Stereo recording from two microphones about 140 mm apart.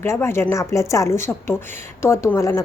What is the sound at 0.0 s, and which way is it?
A woman's voice, 20° left (ahead or behind).